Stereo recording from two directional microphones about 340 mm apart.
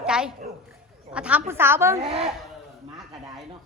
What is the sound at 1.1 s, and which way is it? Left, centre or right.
A woman's voice, centre.